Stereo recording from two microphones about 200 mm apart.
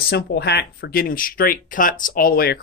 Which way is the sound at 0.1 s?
55° left (ahead or behind).